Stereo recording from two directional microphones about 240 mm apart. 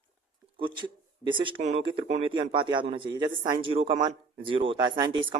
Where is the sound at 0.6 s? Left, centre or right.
Centre.